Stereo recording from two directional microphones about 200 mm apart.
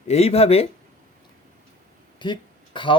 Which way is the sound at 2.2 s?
25° left (ahead or behind).